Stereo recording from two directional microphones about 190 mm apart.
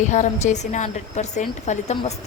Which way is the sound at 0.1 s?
40° left (ahead or behind).